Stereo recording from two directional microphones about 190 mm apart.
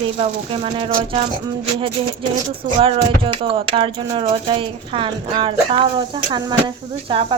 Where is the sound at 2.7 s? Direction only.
30° right (ahead or behind).